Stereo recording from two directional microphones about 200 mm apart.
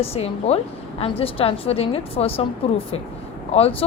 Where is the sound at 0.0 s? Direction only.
30° left (ahead or behind).